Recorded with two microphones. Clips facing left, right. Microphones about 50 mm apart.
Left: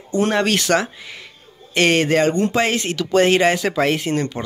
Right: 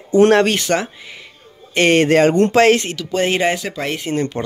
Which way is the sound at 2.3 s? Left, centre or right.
Right.